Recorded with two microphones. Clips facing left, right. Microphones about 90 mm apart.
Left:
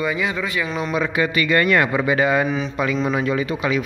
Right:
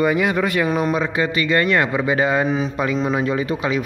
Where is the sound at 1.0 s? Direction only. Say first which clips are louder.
Even; 30° right (ahead or behind).